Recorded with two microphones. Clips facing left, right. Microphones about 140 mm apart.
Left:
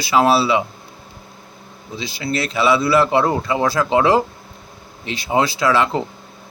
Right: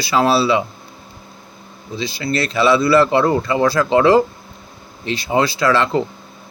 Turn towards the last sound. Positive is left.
turn(degrees=15)  # may be behind; listen again after turning